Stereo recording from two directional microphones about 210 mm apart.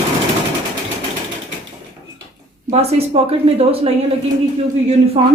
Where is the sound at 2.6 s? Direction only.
30° right (ahead or behind).